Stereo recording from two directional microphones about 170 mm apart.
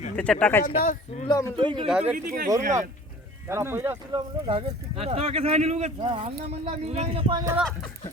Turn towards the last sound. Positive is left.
turn(degrees=-30)  # may be behind; listen again after turning